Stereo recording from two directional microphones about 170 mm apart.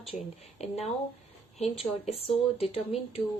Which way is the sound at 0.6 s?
40° left (ahead or behind).